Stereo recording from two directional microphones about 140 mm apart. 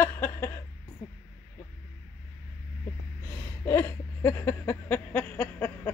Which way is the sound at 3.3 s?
20° left (ahead or behind).